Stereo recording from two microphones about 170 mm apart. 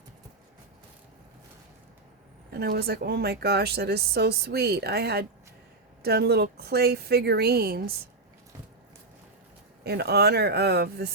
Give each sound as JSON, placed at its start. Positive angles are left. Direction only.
{"t": 2.5, "sound": "speech", "side_deg": -70}
{"t": 9.8, "sound": "speech", "side_deg": -75}